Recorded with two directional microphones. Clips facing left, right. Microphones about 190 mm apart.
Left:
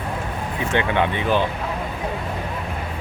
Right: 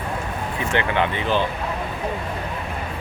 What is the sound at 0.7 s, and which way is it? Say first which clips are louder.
Speech: left 1 dB; 15° left (ahead or behind).